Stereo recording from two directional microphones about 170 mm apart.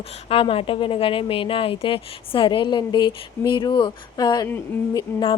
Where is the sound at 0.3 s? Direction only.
35° left (ahead or behind).